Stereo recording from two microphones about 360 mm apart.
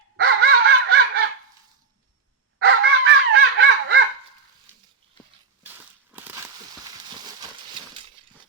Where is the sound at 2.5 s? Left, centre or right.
Right.